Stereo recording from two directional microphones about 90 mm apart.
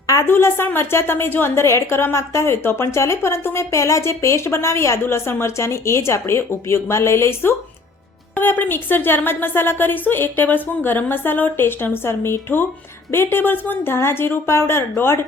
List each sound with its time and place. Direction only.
0.3 s a woman's voice: 25° left (ahead or behind)